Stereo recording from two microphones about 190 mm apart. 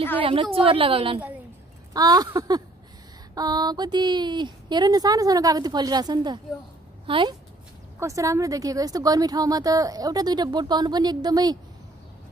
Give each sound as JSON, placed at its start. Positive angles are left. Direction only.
{"t": 0.2, "sound": "a woman's voice", "side_deg": -30}